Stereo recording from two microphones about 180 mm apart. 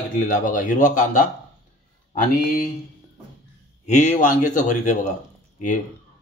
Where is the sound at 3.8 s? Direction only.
40° left (ahead or behind).